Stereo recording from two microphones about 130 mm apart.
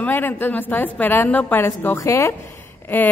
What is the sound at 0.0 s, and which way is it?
A woman's voice, 15° left (ahead or behind).